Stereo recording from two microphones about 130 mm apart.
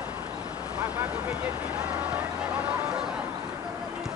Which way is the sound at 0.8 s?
15° right (ahead or behind).